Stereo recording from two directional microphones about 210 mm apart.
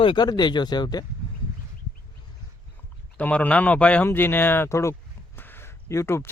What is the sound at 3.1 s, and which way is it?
Speech, 5° left (ahead or behind).